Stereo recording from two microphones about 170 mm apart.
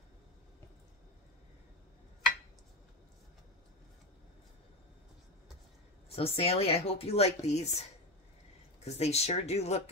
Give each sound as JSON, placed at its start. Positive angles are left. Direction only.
{"t": 6.1, "sound": "speech", "side_deg": 35}
{"t": 8.8, "sound": "speech", "side_deg": 40}